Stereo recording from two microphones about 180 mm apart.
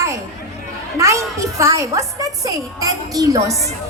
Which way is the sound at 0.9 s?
15° right (ahead or behind).